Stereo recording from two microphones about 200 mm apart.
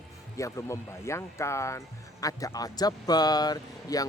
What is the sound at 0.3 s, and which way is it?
Speech, 15° left (ahead or behind).